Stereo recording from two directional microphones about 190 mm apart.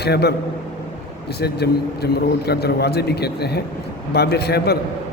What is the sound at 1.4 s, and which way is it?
A man's voice, 60° left (ahead or behind).